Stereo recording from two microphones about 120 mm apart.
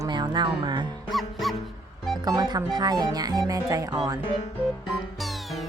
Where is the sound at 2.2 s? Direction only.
35° right (ahead or behind).